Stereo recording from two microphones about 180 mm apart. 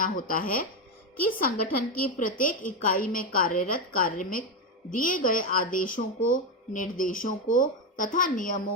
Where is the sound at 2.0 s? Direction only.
50° left (ahead or behind).